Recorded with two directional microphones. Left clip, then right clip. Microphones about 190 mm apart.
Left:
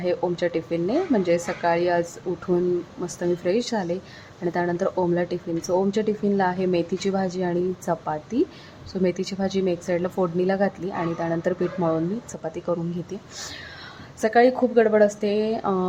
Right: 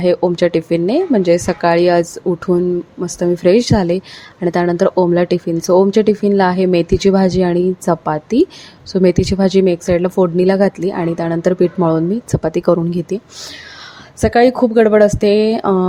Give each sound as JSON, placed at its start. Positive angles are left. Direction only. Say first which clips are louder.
{"t": 0.0, "sound": "a woman's voice", "louder": "right 11 dB", "side_deg": -35}
{"t": 14.2, "sound": "a woman's voice", "louder": "right 7 dB", "side_deg": -35}